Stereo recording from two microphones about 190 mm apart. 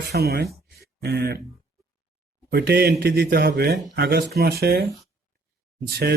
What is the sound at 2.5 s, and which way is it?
A man's voice, 55° right (ahead or behind).